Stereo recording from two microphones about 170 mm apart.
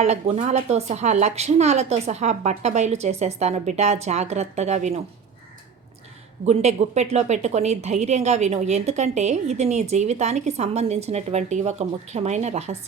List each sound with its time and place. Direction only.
0.0 s a woman's voice: 40° right (ahead or behind)
6.4 s a woman's voice: 40° right (ahead or behind)